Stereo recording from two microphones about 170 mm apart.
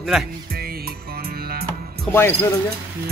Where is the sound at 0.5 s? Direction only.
65° right (ahead or behind).